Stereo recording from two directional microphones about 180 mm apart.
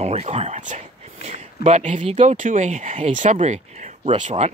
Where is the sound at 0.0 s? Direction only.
35° right (ahead or behind).